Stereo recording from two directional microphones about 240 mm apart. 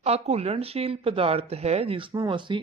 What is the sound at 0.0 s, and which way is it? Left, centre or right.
Speech, right.